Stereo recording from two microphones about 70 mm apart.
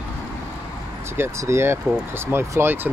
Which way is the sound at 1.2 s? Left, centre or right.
Right.